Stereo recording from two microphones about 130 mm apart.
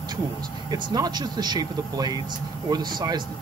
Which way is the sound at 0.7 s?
30° right (ahead or behind).